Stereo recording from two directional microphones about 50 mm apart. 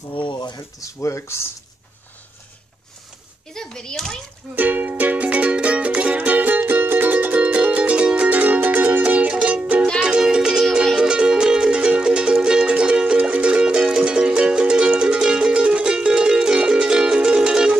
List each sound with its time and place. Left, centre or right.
1.0 s speech: left
3.6 s a child's voice: centre
4.6 s music: right
7.5 s music: right
8.3 s music: right
10.2 s music: centre